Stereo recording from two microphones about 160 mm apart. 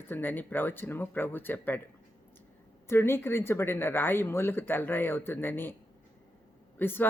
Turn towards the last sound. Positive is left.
turn(degrees=15)  # may be behind; listen again after turning